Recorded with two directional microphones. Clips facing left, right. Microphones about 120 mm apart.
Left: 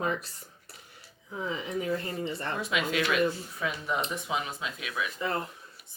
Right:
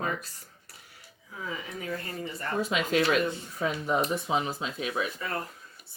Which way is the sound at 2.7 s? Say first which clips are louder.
Right 2 dB; 35° right (ahead or behind).